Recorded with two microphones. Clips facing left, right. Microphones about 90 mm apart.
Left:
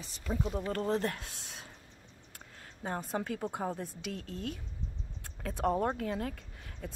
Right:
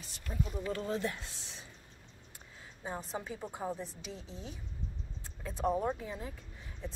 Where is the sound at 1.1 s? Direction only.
60° left (ahead or behind).